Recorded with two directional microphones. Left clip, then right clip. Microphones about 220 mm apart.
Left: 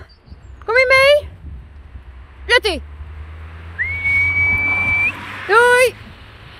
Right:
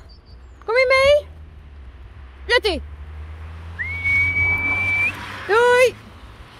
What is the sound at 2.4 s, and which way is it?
Speech, centre (ahead or behind).